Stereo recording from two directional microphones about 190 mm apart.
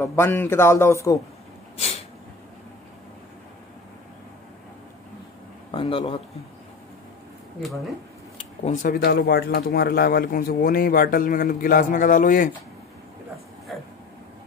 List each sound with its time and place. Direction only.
0.0 s a man's voice: 10° left (ahead or behind)
5.7 s speech: 25° left (ahead or behind)
8.6 s speech: 45° left (ahead or behind)